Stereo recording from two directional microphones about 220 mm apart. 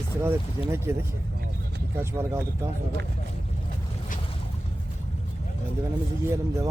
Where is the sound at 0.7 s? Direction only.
10° right (ahead or behind).